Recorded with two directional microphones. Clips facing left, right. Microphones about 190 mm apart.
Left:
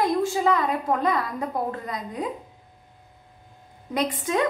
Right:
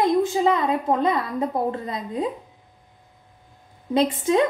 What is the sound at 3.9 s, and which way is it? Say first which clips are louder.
Speech: right 5 dB; 25° right (ahead or behind).